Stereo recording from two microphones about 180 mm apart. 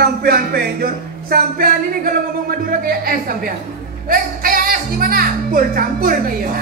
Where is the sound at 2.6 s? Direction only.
55° right (ahead or behind).